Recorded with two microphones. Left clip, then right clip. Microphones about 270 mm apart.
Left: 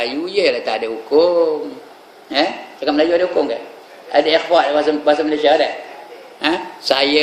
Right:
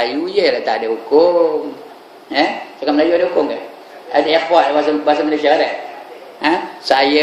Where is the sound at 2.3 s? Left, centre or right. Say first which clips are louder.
Right 2 dB; centre.